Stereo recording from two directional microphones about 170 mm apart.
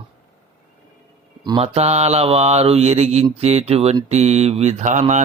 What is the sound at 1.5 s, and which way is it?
Speech, 35° right (ahead or behind).